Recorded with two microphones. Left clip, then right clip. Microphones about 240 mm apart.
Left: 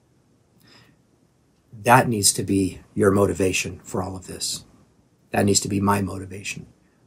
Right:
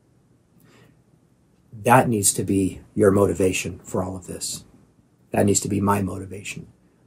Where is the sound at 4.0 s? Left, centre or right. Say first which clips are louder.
Right 2 dB; centre.